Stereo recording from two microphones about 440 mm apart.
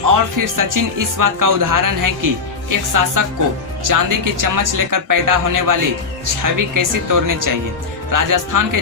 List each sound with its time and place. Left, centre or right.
0.1 s speech: right